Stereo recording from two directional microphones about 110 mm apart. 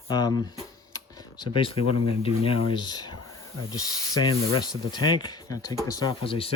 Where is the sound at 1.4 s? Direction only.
50° left (ahead or behind).